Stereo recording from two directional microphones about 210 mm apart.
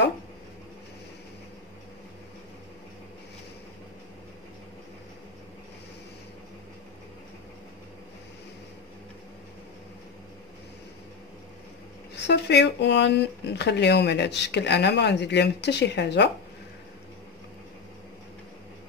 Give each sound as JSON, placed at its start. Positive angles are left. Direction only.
{"t": 12.3, "sound": "speech", "side_deg": 55}